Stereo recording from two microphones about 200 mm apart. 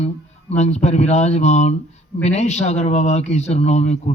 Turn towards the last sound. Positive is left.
turn(degrees=35)  # may be behind; listen again after turning